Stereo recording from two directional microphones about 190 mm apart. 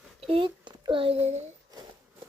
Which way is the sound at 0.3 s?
25° right (ahead or behind).